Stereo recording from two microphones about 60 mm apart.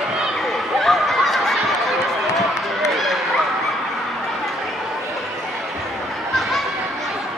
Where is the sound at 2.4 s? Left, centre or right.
Centre.